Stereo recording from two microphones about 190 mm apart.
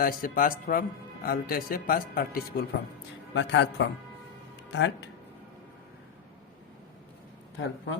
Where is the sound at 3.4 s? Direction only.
70° left (ahead or behind).